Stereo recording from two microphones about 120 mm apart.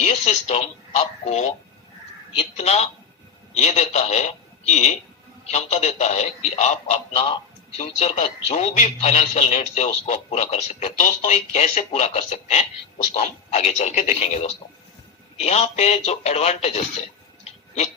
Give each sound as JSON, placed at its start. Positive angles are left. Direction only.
{"t": 0.0, "sound": "speech", "side_deg": 65}
{"t": 2.6, "sound": "a man's voice", "side_deg": 60}